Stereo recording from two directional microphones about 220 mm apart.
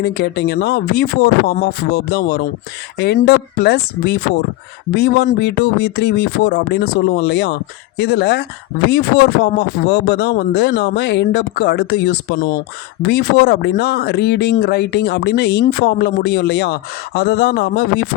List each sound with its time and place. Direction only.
0.0 s speech: 45° left (ahead or behind)